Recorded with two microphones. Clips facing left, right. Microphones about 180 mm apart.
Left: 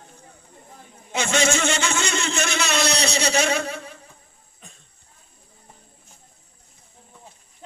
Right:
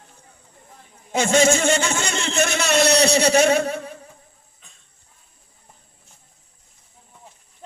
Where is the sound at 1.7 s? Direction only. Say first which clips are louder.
Right 3 dB; 50° right (ahead or behind).